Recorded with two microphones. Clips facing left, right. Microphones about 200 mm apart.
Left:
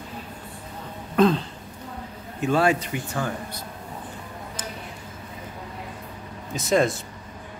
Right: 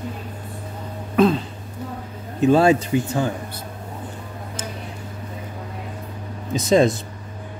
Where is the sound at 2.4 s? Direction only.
25° right (ahead or behind).